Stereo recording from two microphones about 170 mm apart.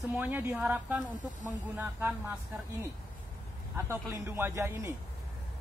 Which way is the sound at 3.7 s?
15° right (ahead or behind).